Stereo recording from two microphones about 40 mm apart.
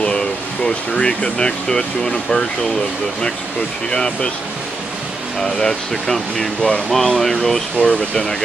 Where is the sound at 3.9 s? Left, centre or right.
Centre.